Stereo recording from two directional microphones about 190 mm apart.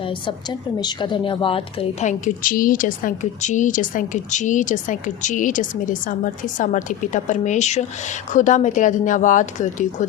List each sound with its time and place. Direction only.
0.0 s a woman's voice: 25° left (ahead or behind); by 10.1 s 40° left (ahead or behind)